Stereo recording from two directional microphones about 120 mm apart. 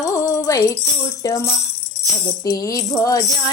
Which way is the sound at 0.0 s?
25° left (ahead or behind).